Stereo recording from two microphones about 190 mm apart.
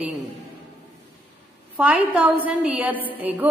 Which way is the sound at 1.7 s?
5° right (ahead or behind).